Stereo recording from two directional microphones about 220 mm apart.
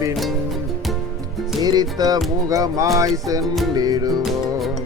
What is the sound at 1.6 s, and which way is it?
Music, 20° right (ahead or behind).